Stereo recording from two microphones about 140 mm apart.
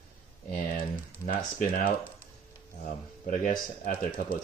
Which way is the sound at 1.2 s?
80° left.